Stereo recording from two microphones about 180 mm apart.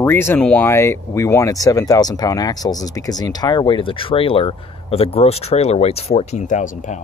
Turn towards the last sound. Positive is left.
turn(degrees=45)  # may be behind; listen again after turning